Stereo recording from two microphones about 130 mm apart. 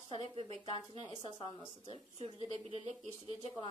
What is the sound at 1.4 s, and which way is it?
Speech, 45° left (ahead or behind).